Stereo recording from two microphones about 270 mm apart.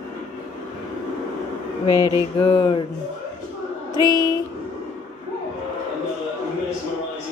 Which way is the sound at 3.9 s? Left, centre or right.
Centre.